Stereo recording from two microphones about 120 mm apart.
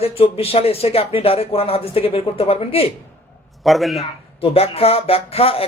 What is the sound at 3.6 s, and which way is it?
Speech, centre (ahead or behind).